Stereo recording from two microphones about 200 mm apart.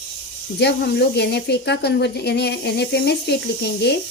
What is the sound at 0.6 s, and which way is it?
Speech, 55° left (ahead or behind).